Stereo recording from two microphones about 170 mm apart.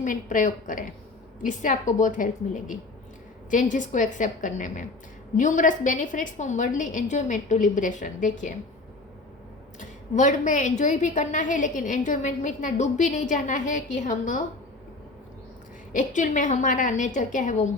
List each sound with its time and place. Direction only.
0.0 s a woman's voice: 50° left (ahead or behind)
10.2 s a woman's voice: 45° left (ahead or behind)
15.9 s a woman's voice: 50° left (ahead or behind)